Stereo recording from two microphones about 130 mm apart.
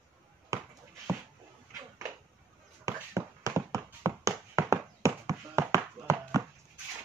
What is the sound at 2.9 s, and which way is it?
Tap, 25° right (ahead or behind).